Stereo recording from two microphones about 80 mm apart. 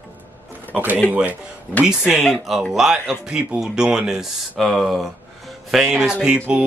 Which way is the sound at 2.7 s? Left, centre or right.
Centre.